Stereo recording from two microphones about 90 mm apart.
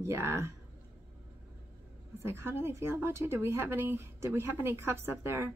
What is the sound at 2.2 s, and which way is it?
Speech, 30° right (ahead or behind).